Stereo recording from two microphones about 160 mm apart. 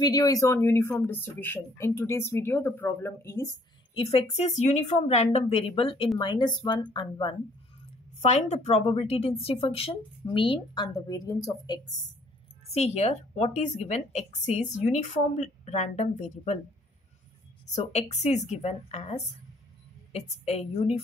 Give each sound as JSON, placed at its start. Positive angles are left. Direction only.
{"t": 0.0, "sound": "speech", "side_deg": 25}
{"t": 3.9, "sound": "a woman's voice", "side_deg": 35}
{"t": 8.2, "sound": "a woman's voice", "side_deg": 45}
{"t": 12.6, "sound": "a woman's voice", "side_deg": 40}
{"t": 17.6, "sound": "a woman's voice", "side_deg": 45}